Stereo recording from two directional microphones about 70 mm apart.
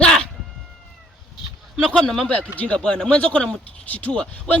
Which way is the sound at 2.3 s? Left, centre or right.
Centre.